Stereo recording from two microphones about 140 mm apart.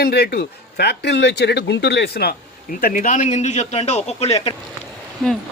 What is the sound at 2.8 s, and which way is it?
A man's voice, 70° left (ahead or behind).